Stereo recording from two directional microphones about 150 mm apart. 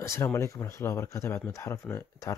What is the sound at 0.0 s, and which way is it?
Speech, 20° left (ahead or behind).